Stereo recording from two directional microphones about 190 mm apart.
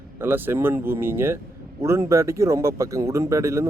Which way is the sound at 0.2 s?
10° right (ahead or behind).